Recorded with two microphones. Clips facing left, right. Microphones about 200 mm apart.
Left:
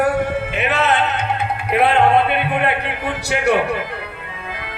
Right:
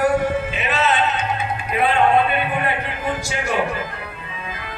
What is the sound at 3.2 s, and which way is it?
Speech, 65° left (ahead or behind).